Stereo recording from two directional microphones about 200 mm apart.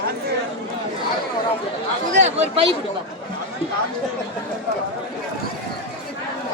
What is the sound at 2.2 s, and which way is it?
Speech, 30° right (ahead or behind).